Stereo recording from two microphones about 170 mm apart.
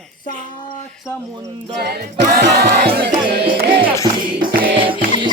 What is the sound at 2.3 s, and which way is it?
Music, 70° right (ahead or behind).